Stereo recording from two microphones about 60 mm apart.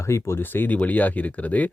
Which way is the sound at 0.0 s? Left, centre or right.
Left.